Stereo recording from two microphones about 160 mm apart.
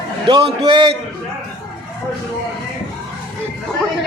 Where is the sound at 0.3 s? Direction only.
35° right (ahead or behind).